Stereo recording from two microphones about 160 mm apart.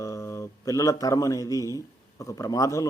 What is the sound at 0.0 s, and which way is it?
A man's voice, 20° left (ahead or behind).